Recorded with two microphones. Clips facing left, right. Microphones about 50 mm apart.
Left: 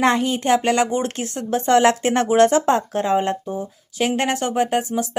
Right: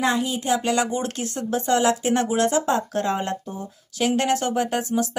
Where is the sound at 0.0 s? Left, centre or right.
Left.